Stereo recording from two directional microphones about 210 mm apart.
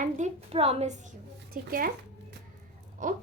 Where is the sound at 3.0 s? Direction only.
40° right (ahead or behind).